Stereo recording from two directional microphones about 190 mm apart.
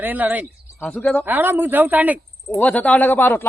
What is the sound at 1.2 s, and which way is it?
Speech, 10° right (ahead or behind).